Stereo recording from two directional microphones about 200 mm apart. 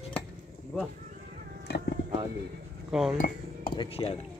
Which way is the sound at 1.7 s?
60° left (ahead or behind).